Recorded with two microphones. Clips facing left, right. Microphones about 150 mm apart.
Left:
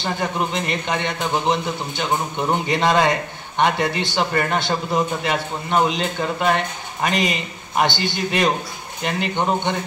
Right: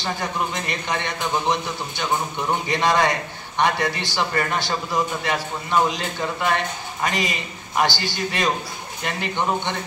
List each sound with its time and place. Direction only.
0.0 s a man's voice: 25° left (ahead or behind)
7.1 s a man's voice: 20° left (ahead or behind)